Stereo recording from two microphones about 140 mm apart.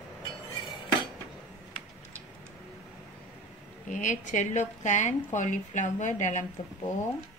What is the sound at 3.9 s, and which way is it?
A woman's voice, 65° left (ahead or behind).